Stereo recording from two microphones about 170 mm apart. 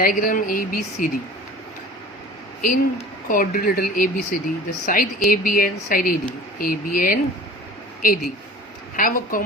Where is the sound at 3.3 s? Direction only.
55° left (ahead or behind).